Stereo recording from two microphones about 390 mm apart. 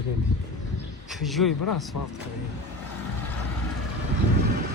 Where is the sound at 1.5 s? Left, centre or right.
Left.